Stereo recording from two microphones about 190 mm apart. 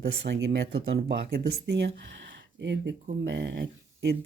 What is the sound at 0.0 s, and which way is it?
Speech, 65° right (ahead or behind).